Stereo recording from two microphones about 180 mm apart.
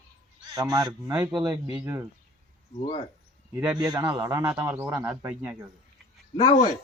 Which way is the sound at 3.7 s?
25° right (ahead or behind).